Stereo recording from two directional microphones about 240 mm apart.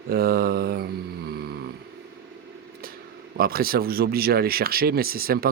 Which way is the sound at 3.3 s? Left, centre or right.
Right.